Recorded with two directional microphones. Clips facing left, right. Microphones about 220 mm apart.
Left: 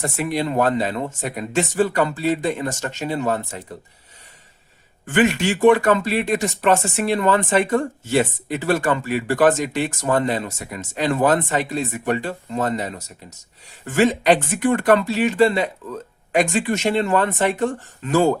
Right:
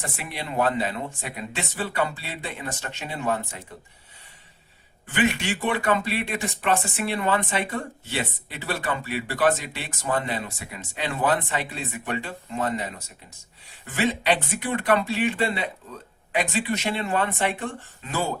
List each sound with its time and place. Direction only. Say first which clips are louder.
0.0 s speech: left 11 dB; 45° left (ahead or behind)
5.0 s speech: left 6 dB; 50° left (ahead or behind)